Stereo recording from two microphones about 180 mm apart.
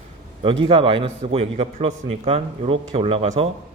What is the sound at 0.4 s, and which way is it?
A man's voice, 30° right (ahead or behind).